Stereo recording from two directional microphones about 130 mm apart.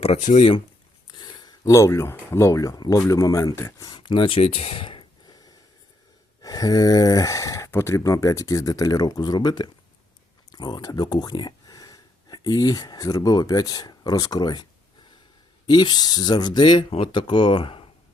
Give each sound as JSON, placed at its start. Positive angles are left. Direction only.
{"t": 1.0, "sound": "speech", "side_deg": 35}